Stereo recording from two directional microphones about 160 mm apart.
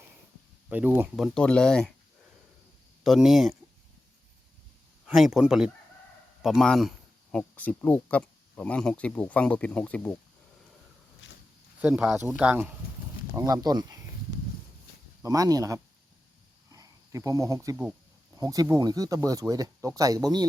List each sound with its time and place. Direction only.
0.7 s speech: 10° right (ahead or behind)
1.1 s speech: centre (ahead or behind)
3.0 s speech: centre (ahead or behind)
5.0 s speech: centre (ahead or behind)
11.8 s speech: 5° right (ahead or behind)
13.3 s speech: 20° right (ahead or behind)
15.2 s speech: 20° right (ahead or behind)
16.7 s a sound: 20° right (ahead or behind)
18.3 s speech: 20° right (ahead or behind)